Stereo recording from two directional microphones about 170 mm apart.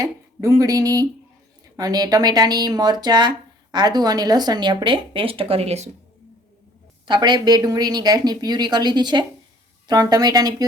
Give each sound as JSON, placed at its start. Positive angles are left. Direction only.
{"t": 0.0, "sound": "speech", "side_deg": -20}
{"t": 7.1, "sound": "speech", "side_deg": -25}